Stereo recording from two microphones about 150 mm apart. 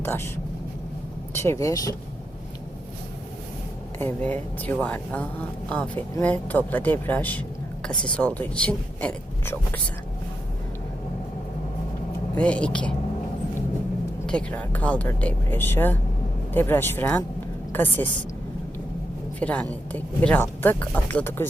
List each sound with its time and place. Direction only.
0.0 s speech: 15° left (ahead or behind)
1.4 s speech: 20° left (ahead or behind)
3.9 s speech: 10° left (ahead or behind)
12.3 s speech: 10° left (ahead or behind)
14.3 s a woman's voice: 10° left (ahead or behind)
19.4 s speech: 10° left (ahead or behind)